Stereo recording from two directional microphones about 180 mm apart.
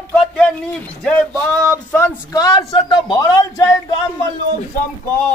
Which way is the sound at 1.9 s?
15° left (ahead or behind).